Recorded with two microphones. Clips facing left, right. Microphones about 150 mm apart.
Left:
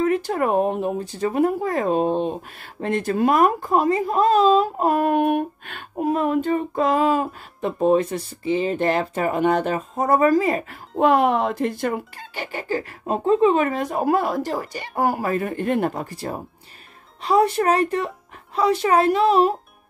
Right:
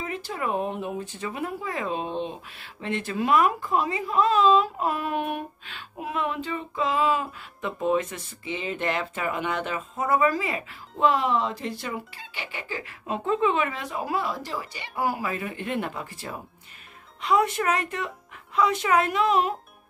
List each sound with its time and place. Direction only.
0.0 s speech: 55° left (ahead or behind); by 19.5 s 35° left (ahead or behind)